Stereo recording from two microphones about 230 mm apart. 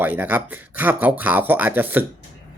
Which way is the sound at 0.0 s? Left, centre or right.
Centre.